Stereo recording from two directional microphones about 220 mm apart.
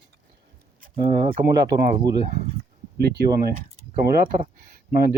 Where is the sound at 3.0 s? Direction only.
45° right (ahead or behind).